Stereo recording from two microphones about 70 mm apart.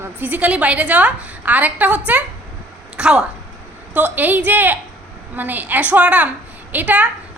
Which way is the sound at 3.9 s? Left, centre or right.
Right.